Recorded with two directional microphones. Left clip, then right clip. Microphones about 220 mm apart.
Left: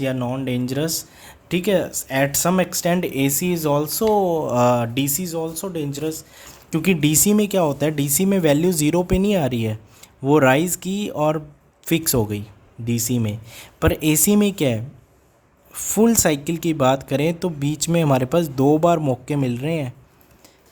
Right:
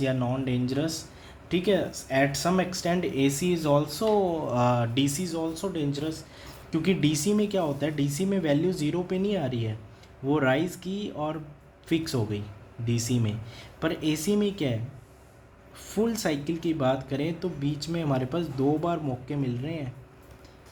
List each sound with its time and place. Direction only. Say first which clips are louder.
0.0 s speech: left 4 dB; 35° left (ahead or behind); by 12.4 s 50° left (ahead or behind)
12.8 s speech: left 6 dB; 40° left (ahead or behind)